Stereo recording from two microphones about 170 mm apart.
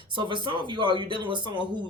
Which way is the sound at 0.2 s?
30° right (ahead or behind).